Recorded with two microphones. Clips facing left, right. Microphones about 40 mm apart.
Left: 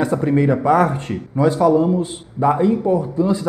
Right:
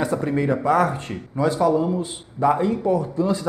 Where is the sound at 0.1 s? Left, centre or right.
Left.